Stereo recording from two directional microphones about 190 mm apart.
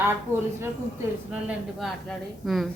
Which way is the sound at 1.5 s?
Centre (ahead or behind).